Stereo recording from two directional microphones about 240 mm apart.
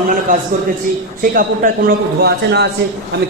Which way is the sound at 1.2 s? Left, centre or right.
Right.